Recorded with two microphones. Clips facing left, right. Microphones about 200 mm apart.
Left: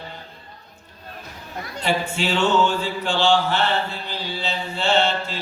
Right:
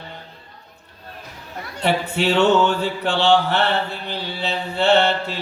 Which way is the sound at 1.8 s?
60° right (ahead or behind).